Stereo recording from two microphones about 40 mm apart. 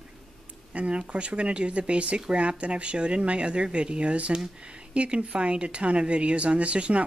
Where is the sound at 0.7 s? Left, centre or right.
Right.